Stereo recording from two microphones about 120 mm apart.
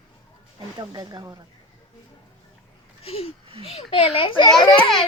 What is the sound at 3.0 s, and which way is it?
A child's voice, 55° left (ahead or behind).